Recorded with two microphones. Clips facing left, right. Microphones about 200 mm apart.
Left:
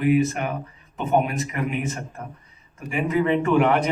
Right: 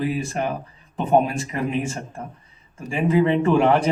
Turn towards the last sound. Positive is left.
turn(degrees=-30)  # may be behind; listen again after turning